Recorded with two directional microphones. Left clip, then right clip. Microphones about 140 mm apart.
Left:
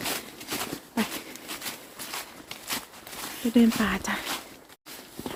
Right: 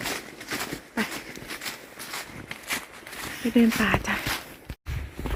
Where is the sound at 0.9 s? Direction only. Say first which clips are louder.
Right 1 dB; 20° left (ahead or behind).